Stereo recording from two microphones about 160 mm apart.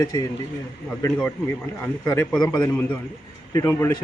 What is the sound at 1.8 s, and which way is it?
Speech, 10° left (ahead or behind).